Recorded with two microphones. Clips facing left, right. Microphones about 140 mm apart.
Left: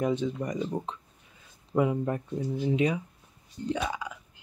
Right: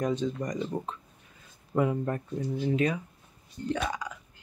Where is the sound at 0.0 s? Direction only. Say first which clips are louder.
Left 1 dB; 15° left (ahead or behind).